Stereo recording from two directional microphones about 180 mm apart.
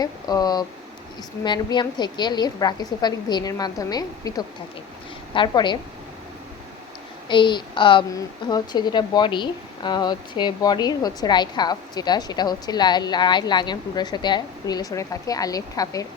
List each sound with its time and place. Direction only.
0.0 s a woman's voice: 20° left (ahead or behind)
7.3 s a woman's voice: 25° left (ahead or behind)